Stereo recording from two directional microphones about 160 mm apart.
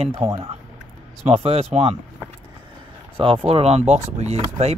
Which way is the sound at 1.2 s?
40° right (ahead or behind).